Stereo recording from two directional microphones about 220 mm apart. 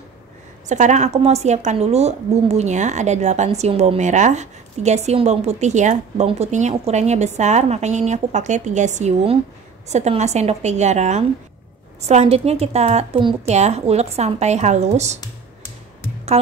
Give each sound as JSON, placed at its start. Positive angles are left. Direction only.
{"t": 0.7, "sound": "a woman's voice", "side_deg": -35}